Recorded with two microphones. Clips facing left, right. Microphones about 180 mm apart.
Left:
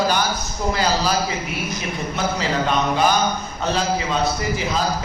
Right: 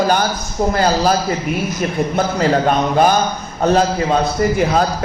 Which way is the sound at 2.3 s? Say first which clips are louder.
Right 7 dB; 50° right (ahead or behind).